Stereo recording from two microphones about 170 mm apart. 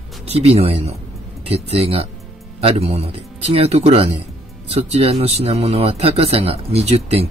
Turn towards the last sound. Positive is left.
turn(degrees=-35)  # may be behind; listen again after turning